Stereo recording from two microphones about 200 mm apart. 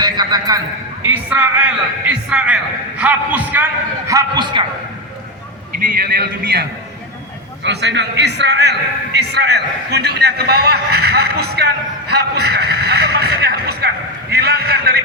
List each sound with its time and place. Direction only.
0.0 s a man's voice: 20° right (ahead or behind)
1.0 s a man's voice: 10° right (ahead or behind)
5.7 s a man's voice: 45° right (ahead or behind)